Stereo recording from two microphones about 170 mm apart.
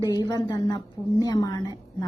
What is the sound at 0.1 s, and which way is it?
A woman's voice, 25° left (ahead or behind).